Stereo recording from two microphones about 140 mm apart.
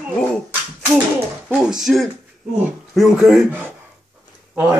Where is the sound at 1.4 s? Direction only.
5° right (ahead or behind).